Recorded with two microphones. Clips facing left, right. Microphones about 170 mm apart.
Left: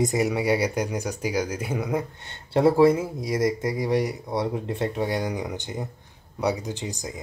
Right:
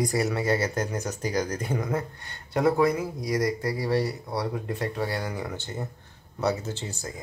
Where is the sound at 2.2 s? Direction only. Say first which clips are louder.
Left 5 dB; 25° left (ahead or behind).